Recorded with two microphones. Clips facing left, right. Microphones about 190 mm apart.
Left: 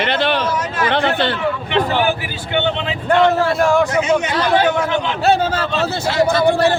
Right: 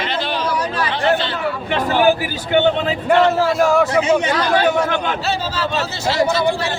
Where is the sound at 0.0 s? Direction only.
65° left (ahead or behind).